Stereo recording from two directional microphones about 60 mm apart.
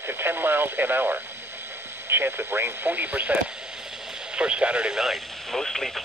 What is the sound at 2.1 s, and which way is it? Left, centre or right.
Speech, right.